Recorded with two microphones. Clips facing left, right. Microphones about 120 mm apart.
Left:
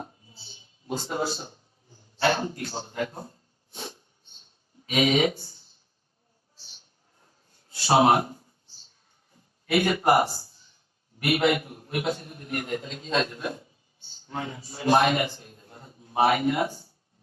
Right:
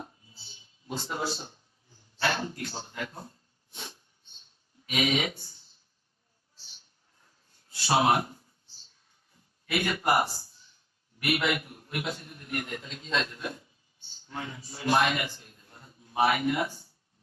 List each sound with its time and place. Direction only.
0.9 s speech: 45° left (ahead or behind)
2.1 s a man's voice: 35° left (ahead or behind)
5.3 s speech: 55° left (ahead or behind)
7.7 s speech: 30° left (ahead or behind)
9.6 s a man's voice: 35° left (ahead or behind)